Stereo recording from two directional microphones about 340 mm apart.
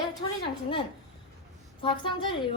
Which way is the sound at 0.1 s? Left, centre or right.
Centre.